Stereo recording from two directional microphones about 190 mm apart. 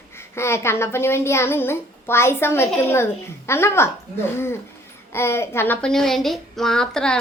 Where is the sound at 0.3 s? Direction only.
15° left (ahead or behind).